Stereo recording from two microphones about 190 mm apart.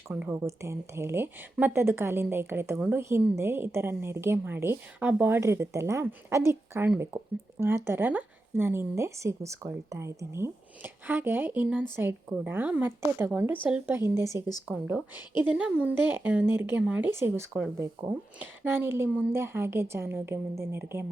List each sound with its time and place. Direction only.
0.1 s speech: 10° right (ahead or behind)